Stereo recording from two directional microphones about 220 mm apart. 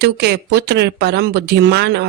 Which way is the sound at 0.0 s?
50° right (ahead or behind).